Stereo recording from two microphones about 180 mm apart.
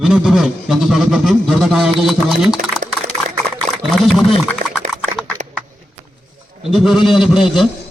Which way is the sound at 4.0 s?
Centre (ahead or behind).